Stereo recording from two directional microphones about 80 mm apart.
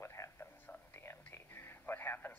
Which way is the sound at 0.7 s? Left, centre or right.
Left.